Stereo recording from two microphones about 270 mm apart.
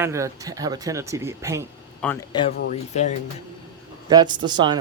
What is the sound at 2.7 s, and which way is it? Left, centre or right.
Speech, left.